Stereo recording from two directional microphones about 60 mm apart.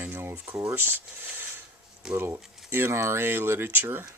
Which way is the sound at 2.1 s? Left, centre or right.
Right.